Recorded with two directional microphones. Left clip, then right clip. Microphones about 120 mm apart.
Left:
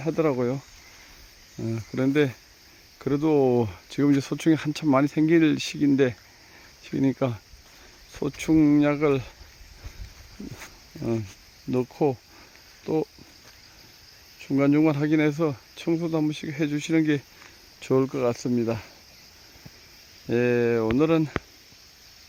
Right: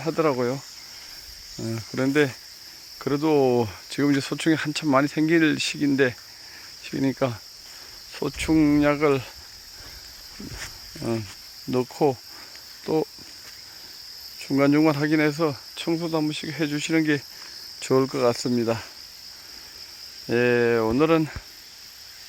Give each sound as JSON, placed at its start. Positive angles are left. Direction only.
{"t": 0.0, "sound": "cricket", "side_deg": 30}
{"t": 1.5, "sound": "cricket", "side_deg": 20}
{"t": 4.2, "sound": "speech", "side_deg": 35}
{"t": 8.1, "sound": "cricket", "side_deg": 30}
{"t": 11.0, "sound": "cricket", "side_deg": 15}
{"t": 12.8, "sound": "speech", "side_deg": 5}
{"t": 14.4, "sound": "cricket", "side_deg": 5}
{"t": 17.7, "sound": "cricket", "side_deg": 15}
{"t": 18.0, "sound": "cricket", "side_deg": 0}
{"t": 20.3, "sound": "cricket", "side_deg": 20}